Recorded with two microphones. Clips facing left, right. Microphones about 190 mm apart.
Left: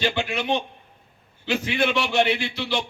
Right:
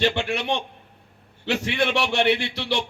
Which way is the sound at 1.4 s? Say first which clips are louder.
Even; 70° right (ahead or behind).